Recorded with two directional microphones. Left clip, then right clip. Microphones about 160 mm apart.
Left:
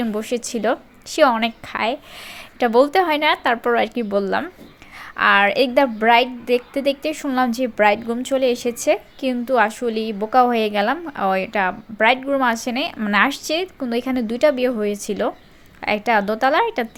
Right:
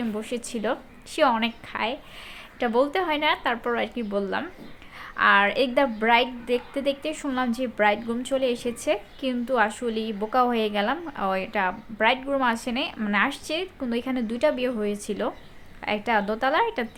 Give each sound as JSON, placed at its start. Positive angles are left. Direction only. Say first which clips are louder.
{"t": 0.0, "sound": "a woman's voice", "louder": "left 7 dB", "side_deg": 35}